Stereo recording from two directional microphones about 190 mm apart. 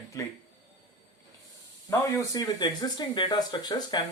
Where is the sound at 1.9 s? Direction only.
15° left (ahead or behind).